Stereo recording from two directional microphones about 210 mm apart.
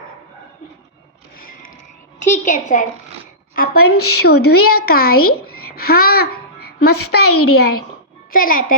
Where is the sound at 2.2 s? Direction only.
35° left (ahead or behind).